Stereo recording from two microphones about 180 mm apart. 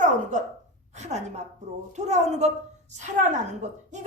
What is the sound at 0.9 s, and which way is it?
A woman's voice, 40° right (ahead or behind).